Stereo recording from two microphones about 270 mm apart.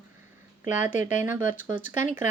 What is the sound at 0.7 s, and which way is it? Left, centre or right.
Speech, left.